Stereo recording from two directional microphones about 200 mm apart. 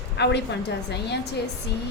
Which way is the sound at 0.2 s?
55° left (ahead or behind).